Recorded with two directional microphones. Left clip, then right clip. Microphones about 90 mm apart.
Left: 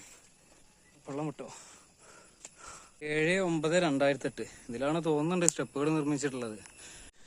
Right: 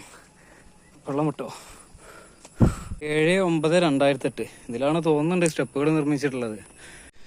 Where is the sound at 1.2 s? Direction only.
Centre (ahead or behind).